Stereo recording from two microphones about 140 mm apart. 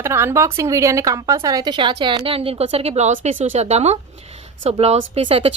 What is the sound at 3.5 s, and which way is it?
A woman's voice, 50° right (ahead or behind).